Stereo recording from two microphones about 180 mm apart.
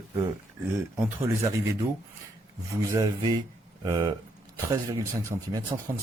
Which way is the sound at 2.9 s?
20° right (ahead or behind).